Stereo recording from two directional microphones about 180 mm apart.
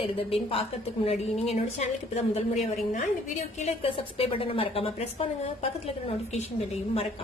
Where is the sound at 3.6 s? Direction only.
35° left (ahead or behind).